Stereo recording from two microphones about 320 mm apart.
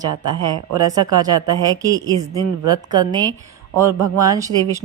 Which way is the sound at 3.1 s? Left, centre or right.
Centre.